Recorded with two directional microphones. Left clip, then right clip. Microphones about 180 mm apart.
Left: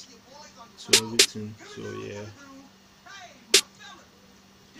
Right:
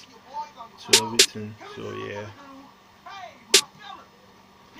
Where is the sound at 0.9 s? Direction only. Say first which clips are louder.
Right 2 dB; centre (ahead or behind).